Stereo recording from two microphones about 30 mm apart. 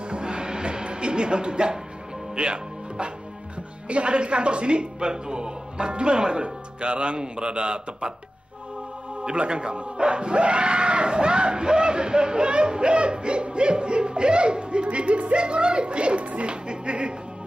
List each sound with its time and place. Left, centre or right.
0.1 s music: right
3.9 s speech: right
9.4 s a sound: right